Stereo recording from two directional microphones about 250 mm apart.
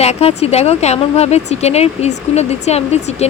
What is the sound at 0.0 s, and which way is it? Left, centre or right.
Speech, left.